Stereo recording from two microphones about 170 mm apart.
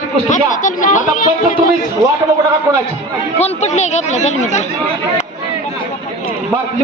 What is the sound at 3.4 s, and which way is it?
Speech, 40° left (ahead or behind).